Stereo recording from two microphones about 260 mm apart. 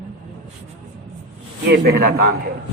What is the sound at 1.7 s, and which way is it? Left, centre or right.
Speech, right.